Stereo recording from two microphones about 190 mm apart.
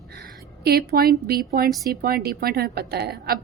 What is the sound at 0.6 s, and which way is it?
A woman's voice, 55° right (ahead or behind).